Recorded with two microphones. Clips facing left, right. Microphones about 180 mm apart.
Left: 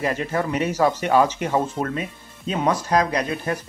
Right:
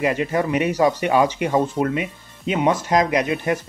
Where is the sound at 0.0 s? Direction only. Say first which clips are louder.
Right 3 dB; 10° right (ahead or behind).